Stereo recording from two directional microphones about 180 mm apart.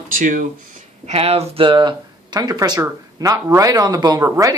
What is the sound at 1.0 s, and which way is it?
Speech, 35° right (ahead or behind).